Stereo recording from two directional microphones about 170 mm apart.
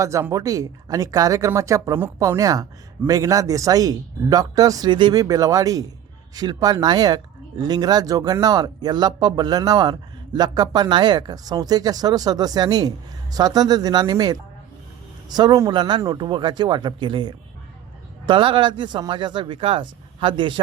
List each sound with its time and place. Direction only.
0.0 s speech: 20° right (ahead or behind)